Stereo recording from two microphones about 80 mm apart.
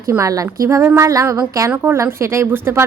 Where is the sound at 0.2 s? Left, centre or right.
Right.